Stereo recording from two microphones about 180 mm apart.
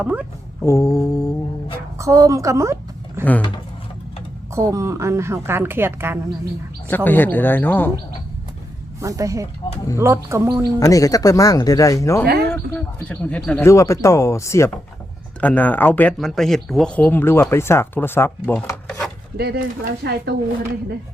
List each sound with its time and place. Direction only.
0.0 s a woman's voice: 10° right (ahead or behind)
0.6 s speech: 15° left (ahead or behind)
2.0 s a woman's voice: 15° right (ahead or behind)
4.5 s a woman's voice: 15° right (ahead or behind)
6.9 s speech: 10° left (ahead or behind)
9.0 s a woman's voice: 20° right (ahead or behind)
10.8 s speech: 20° left (ahead or behind)
12.2 s speech: 60° right (ahead or behind)
12.5 s speech: 10° left (ahead or behind)
19.4 s speech: 55° right (ahead or behind)